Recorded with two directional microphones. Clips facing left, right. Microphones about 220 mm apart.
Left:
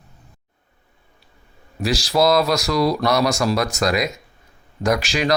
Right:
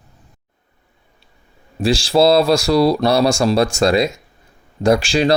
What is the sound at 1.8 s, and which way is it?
Speech, 30° right (ahead or behind).